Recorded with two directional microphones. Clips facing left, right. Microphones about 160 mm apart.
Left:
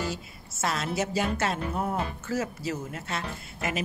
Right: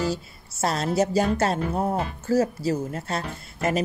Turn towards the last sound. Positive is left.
turn(degrees=-40)  # may be behind; listen again after turning